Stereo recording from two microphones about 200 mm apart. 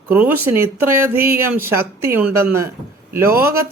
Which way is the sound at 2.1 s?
10° right (ahead or behind).